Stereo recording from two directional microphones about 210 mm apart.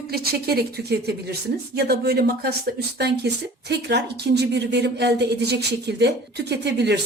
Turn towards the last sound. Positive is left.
turn(degrees=-55)  # may be behind; listen again after turning